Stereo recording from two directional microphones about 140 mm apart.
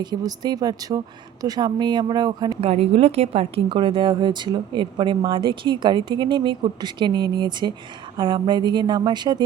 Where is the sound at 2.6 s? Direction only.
45° right (ahead or behind).